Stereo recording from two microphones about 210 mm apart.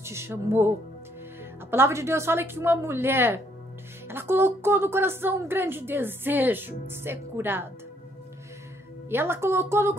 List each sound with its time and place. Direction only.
0.0 s a woman's voice: 10° right (ahead or behind)
9.1 s a woman's voice: 10° right (ahead or behind)